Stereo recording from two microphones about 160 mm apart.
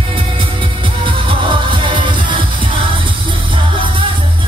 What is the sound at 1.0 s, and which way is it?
Music, 30° right (ahead or behind).